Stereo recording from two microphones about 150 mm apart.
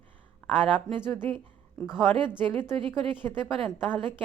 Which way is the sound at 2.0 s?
35° right (ahead or behind).